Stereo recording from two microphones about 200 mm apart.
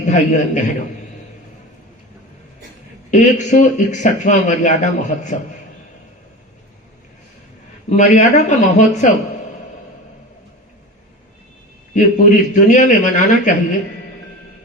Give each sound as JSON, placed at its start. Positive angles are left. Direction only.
{"t": 0.0, "sound": "a man's voice", "side_deg": 35}
{"t": 3.1, "sound": "speech", "side_deg": 35}
{"t": 7.9, "sound": "speech", "side_deg": 35}
{"t": 11.9, "sound": "speech", "side_deg": 40}